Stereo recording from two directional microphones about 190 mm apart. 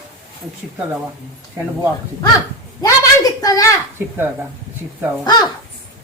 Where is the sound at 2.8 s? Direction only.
20° left (ahead or behind).